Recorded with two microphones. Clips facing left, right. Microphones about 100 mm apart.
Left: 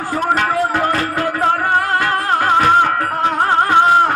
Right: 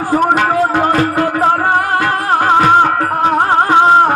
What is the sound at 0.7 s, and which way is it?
Music, 30° right (ahead or behind).